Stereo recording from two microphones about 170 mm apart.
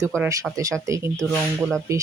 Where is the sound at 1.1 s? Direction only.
5° left (ahead or behind).